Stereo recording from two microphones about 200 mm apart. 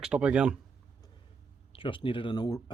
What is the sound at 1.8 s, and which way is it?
Speech, 25° left (ahead or behind).